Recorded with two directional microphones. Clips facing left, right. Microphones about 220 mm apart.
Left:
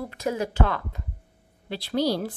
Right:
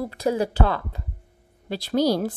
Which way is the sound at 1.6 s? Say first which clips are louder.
Right 4 dB; 45° right (ahead or behind).